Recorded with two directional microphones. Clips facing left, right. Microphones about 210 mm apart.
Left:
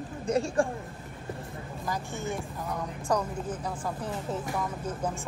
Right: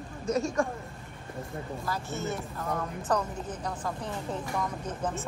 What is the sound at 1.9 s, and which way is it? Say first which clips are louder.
A woman's voice: left 1 dB; 15° left (ahead or behind).